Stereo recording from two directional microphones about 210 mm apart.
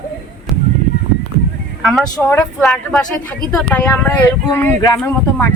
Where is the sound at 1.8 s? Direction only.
Centre (ahead or behind).